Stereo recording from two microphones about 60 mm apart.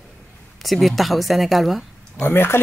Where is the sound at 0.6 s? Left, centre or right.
Centre.